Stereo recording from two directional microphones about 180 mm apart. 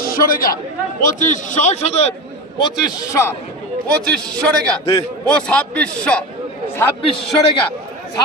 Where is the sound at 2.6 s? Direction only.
15° left (ahead or behind).